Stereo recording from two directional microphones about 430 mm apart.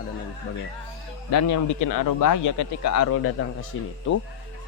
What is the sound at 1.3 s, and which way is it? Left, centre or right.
A man's voice, left.